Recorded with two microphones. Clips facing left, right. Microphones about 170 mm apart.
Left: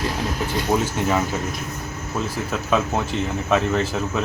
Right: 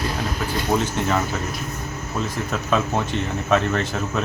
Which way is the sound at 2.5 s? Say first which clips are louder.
Left 1 dB; 5° left (ahead or behind).